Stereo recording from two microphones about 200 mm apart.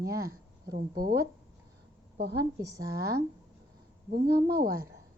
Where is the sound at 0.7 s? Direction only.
50° right (ahead or behind).